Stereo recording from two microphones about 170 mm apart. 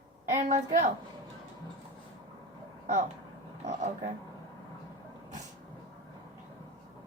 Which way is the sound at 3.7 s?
40° right (ahead or behind).